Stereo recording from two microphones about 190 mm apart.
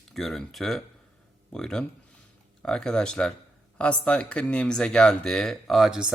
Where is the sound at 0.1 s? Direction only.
Centre (ahead or behind).